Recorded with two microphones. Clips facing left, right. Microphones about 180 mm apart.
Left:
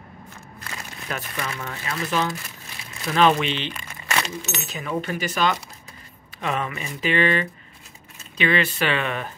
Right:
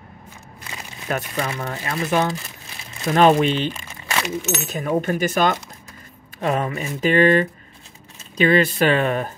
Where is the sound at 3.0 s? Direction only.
45° right (ahead or behind).